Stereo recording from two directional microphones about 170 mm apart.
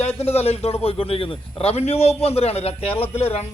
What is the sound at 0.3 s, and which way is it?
A man's voice, 35° left (ahead or behind).